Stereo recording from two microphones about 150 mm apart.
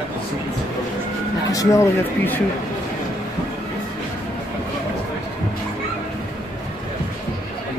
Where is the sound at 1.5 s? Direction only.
20° left (ahead or behind).